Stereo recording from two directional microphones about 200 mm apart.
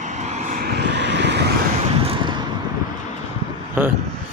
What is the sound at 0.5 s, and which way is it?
Vehicle, 50° right (ahead or behind).